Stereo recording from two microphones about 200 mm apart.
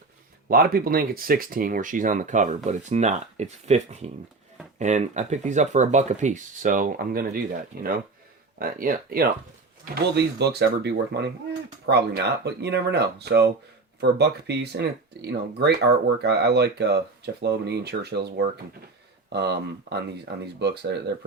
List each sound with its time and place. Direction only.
0.4 s speech: 50° right (ahead or behind)